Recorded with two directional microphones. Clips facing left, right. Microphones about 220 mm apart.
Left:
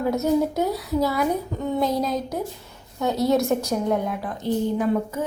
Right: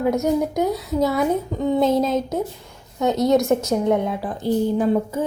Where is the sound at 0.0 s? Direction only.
15° right (ahead or behind).